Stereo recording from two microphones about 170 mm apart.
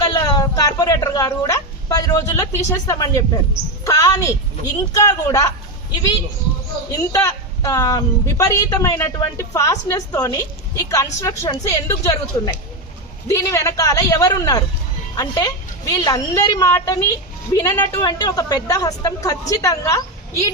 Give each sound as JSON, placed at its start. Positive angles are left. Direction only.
{"t": 0.0, "sound": "a woman's voice", "side_deg": 20}
{"t": 7.1, "sound": "a woman's voice", "side_deg": 20}